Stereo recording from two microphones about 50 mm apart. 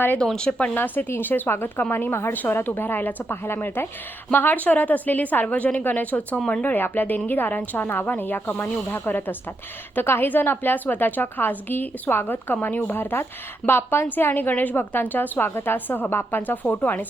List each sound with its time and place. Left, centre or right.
0.3 s speech: left
0.7 s a woman's voice: left
2.3 s a woman's voice: left
3.4 s a woman's voice: left
4.3 s a woman's voice: left
6.7 s a woman's voice: left